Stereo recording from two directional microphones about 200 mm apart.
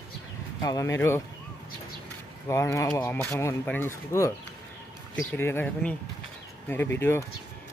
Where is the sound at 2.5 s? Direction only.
15° left (ahead or behind).